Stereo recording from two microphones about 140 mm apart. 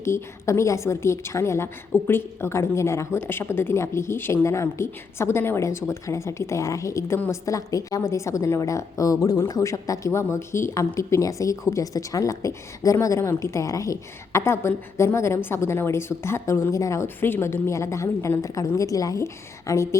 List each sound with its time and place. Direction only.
0.0 s a woman's voice: 20° left (ahead or behind)